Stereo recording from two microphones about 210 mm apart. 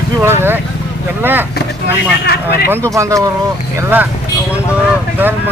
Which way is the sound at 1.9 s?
50° left (ahead or behind).